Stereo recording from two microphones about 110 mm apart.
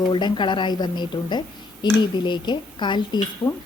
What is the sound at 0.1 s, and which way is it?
A woman's voice, 45° left (ahead or behind).